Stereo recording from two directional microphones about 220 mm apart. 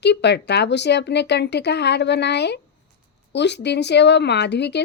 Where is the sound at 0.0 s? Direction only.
50° left (ahead or behind).